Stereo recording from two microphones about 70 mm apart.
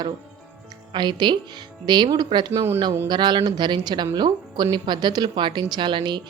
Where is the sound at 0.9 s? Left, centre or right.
Right.